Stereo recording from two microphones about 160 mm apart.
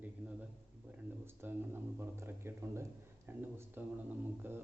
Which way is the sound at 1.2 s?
15° right (ahead or behind).